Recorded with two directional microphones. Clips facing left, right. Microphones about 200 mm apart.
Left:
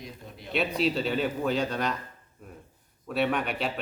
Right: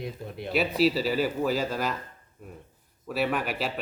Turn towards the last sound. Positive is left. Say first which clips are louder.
# even
turn(degrees=-5)  # may be behind; listen again after turning